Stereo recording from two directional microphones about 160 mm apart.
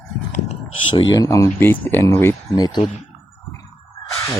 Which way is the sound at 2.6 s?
25° left (ahead or behind).